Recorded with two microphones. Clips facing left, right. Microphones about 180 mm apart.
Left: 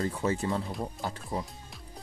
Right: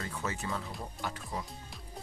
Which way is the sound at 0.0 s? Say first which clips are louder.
Left 8 dB; 30° left (ahead or behind).